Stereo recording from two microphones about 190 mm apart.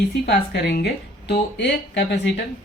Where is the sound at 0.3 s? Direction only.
60° left (ahead or behind).